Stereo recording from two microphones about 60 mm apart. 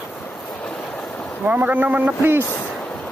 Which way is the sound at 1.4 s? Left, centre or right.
Right.